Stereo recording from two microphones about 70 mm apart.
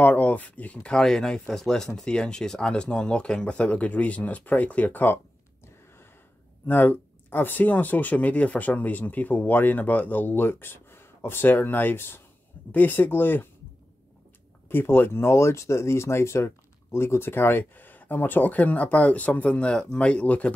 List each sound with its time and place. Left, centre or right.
0.0 s speech: left
6.6 s speech: left
14.7 s speech: left